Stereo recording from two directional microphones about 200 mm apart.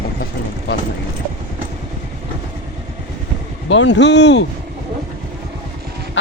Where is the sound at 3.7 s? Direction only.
65° left (ahead or behind).